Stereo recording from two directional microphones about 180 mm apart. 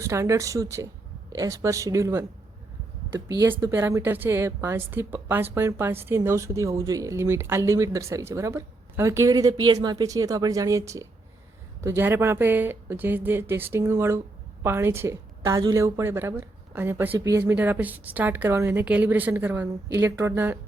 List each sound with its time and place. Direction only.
0.0 s a woman's voice: 15° right (ahead or behind)
3.2 s a woman's voice: 20° right (ahead or behind)